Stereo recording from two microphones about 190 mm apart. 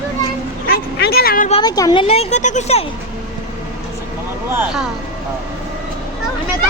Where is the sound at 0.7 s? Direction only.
55° left (ahead or behind).